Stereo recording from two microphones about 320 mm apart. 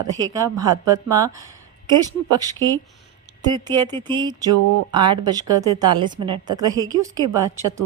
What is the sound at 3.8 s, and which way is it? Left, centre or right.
A woman's voice, centre.